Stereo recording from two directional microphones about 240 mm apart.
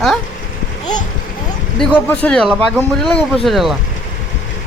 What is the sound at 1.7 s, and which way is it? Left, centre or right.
Speech, centre.